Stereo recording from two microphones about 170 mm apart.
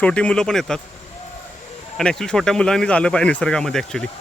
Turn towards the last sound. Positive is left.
turn(degrees=5)  # may be behind; listen again after turning